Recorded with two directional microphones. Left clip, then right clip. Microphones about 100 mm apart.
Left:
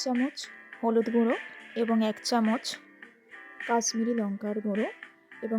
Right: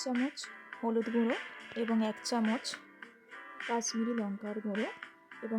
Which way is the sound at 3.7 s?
40° left (ahead or behind).